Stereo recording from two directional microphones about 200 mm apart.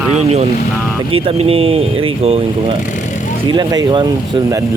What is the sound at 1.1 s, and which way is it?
Speech, 30° right (ahead or behind).